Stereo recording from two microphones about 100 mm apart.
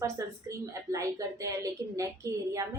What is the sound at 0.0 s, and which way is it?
A woman's voice, 30° right (ahead or behind).